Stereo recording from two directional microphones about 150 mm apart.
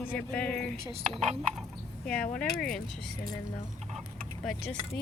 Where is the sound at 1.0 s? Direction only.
45° right (ahead or behind).